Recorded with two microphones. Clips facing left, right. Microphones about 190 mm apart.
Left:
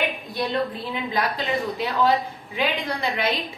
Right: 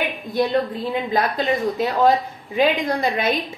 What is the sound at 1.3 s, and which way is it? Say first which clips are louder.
A woman's voice: right 5 dB; 45° right (ahead or behind).